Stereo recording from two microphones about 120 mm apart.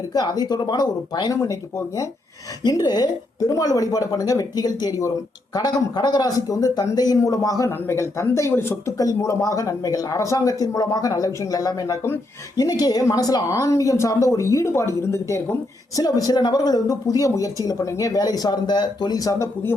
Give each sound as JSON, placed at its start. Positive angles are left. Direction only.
{"t": 0.1, "sound": "a woman's voice", "side_deg": 35}